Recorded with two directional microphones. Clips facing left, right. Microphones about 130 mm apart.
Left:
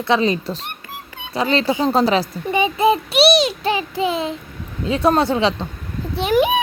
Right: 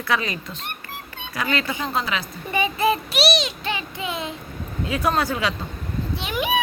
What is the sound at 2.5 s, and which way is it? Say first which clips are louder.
Speech: left 5 dB; 20° left (ahead or behind).